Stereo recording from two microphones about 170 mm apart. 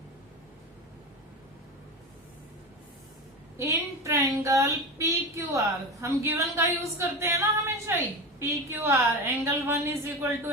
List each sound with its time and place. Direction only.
3.6 s a woman's voice: 15° right (ahead or behind)